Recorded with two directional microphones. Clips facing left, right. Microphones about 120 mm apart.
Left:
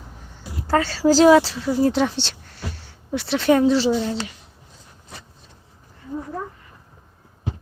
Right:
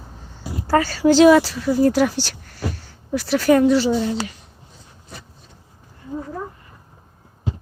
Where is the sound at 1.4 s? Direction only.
Centre (ahead or behind).